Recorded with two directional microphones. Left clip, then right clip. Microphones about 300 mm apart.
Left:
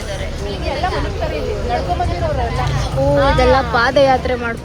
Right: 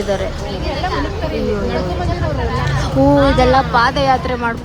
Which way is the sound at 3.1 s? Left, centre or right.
Centre.